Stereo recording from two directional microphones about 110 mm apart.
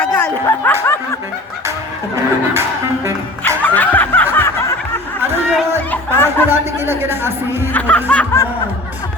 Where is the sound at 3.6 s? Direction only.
15° left (ahead or behind).